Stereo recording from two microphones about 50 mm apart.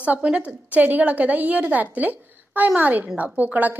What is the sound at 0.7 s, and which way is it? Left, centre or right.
A woman's voice, right.